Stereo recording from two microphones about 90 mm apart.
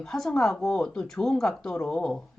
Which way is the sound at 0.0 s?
5° left (ahead or behind).